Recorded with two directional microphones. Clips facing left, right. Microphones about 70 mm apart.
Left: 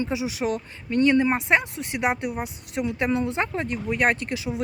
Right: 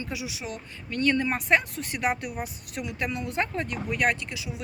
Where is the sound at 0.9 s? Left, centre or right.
Centre.